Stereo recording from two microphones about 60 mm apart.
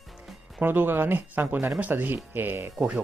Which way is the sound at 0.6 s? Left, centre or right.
Right.